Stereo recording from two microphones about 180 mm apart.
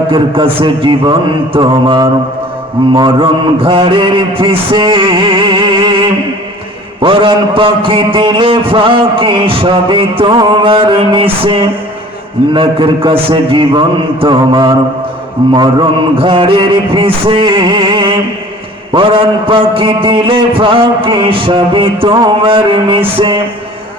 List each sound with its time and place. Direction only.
0.1 s a man's voice: 30° right (ahead or behind)
7.0 s a man's voice: 30° right (ahead or behind)